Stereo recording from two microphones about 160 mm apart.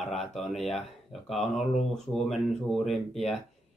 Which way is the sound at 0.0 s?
Centre (ahead or behind).